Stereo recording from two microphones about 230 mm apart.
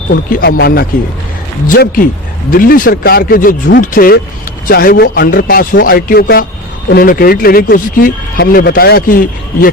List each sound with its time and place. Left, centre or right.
0.1 s speech: left